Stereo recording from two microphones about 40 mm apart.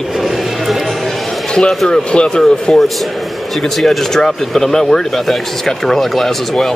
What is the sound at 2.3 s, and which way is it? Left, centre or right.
Speech, centre.